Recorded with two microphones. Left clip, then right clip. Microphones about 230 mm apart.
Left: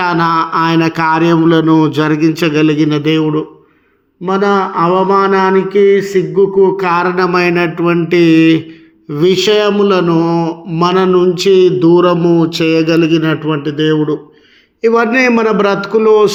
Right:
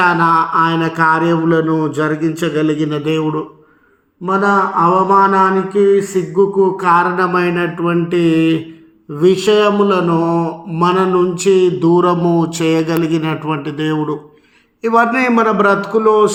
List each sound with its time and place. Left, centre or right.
0.0 s mantra: left